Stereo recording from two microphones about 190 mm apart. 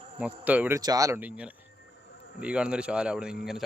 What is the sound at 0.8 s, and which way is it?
Speech, 20° right (ahead or behind).